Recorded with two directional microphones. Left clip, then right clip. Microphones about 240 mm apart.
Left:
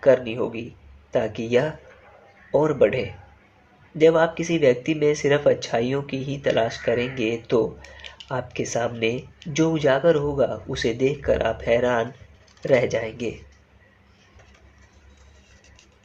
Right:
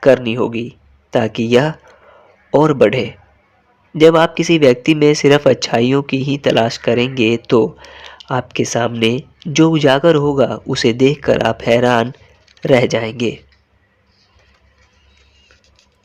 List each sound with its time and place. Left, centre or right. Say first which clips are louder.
0.0 s speech: right 7 dB; right